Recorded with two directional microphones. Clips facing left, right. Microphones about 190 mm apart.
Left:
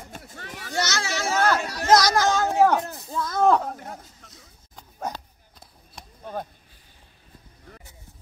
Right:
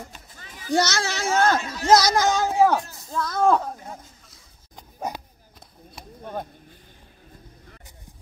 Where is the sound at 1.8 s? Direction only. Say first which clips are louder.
Right 1 dB; 5° right (ahead or behind).